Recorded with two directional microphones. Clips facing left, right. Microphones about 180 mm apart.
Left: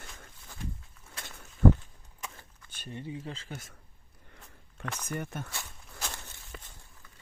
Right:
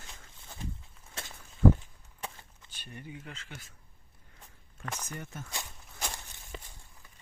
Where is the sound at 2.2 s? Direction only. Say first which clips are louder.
Right 2 dB; 30° right (ahead or behind).